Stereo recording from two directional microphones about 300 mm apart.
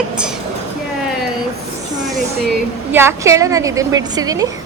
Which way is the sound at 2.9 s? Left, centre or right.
Centre.